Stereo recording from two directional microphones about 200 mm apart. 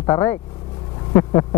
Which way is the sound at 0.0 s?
15° left (ahead or behind).